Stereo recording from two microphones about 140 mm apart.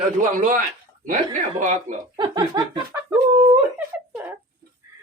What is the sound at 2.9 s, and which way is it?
Chicken, 15° right (ahead or behind).